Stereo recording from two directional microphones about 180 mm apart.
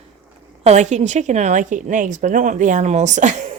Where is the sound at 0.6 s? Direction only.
40° right (ahead or behind).